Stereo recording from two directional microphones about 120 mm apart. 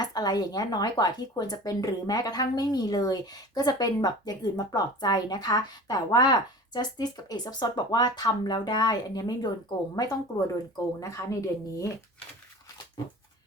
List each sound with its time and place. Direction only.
0.0 s speech: 35° left (ahead or behind)